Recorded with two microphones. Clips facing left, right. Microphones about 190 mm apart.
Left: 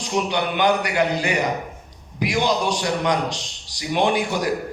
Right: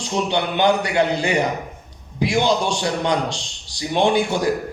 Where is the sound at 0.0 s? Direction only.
30° right (ahead or behind).